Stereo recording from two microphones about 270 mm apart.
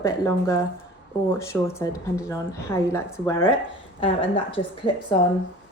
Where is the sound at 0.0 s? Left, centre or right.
Centre.